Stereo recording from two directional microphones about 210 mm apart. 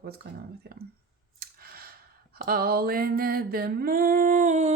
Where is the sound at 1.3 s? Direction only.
45° right (ahead or behind).